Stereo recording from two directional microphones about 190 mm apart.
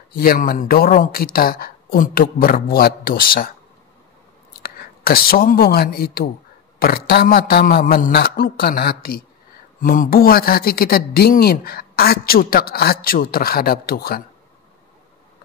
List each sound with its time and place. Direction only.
0.2 s speech: 50° left (ahead or behind)
4.6 s speech: 50° left (ahead or behind)